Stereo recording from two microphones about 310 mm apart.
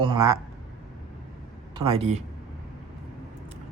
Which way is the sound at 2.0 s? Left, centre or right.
Right.